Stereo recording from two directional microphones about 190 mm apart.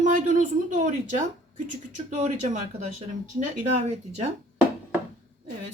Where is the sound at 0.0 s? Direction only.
40° right (ahead or behind).